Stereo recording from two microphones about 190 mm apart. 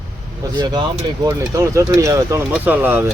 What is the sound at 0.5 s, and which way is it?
Speech, 20° right (ahead or behind).